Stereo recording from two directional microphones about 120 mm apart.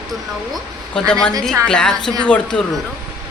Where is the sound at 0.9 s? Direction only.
5° left (ahead or behind).